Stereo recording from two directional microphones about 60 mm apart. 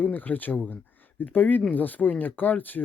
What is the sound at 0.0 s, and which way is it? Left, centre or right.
Speech, left.